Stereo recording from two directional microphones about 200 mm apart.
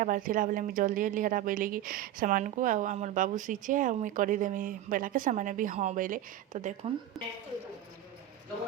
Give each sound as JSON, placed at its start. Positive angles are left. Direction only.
{"t": 0.0, "sound": "a woman's voice", "side_deg": -45}
{"t": 7.1, "sound": "a woman's voice", "side_deg": 0}